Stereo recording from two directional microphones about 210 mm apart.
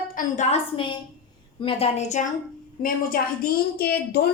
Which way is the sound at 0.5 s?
25° left (ahead or behind).